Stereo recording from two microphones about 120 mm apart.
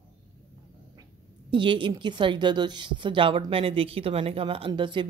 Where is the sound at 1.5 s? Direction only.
45° right (ahead or behind).